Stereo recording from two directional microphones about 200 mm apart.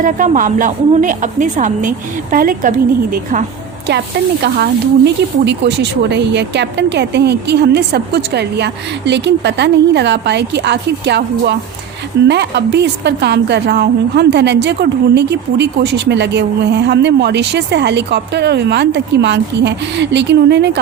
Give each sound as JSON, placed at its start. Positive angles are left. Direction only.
{"t": 0.0, "sound": "a woman's voice", "side_deg": -40}
{"t": 4.4, "sound": "a woman's voice", "side_deg": -55}